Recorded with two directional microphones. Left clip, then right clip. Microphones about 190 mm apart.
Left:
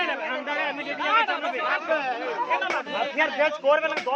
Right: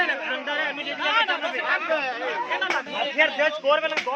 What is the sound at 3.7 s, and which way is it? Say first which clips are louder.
Speech: left 1 dB; 30° left (ahead or behind).